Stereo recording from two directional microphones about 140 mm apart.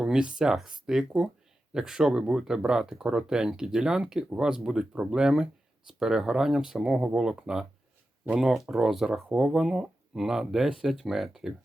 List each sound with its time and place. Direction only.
0.0 s speech: 5° right (ahead or behind)